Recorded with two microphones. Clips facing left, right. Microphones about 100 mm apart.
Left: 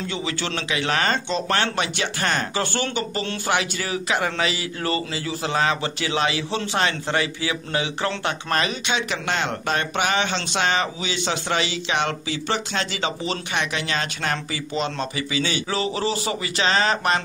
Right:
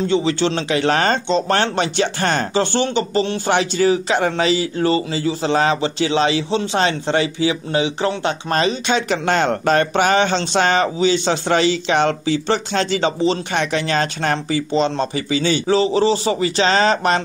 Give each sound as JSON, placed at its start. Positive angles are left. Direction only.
{"t": 0.0, "sound": "speech", "side_deg": -30}
{"t": 2.6, "sound": "speech", "side_deg": -25}
{"t": 8.8, "sound": "speech", "side_deg": -40}